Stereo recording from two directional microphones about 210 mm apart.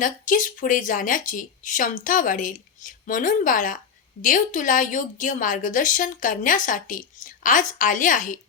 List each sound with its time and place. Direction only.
0.0 s a woman's voice: 40° left (ahead or behind)